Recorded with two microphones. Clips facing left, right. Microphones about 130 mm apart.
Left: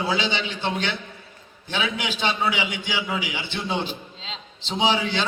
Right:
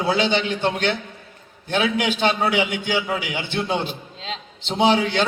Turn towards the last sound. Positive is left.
turn(degrees=-55)  # may be behind; listen again after turning